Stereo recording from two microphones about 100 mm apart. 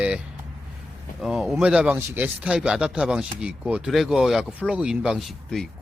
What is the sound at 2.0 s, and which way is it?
Speech, 25° right (ahead or behind).